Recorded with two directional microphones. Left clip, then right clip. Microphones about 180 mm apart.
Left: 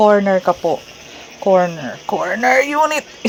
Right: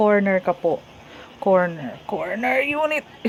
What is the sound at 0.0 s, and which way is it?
Speech, 10° left (ahead or behind).